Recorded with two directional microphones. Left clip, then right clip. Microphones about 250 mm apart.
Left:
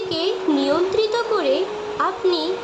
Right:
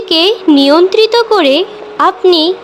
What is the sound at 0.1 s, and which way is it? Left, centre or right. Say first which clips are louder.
A woman's voice: right 14 dB; right.